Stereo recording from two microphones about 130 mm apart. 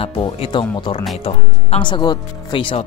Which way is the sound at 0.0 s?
45° left (ahead or behind).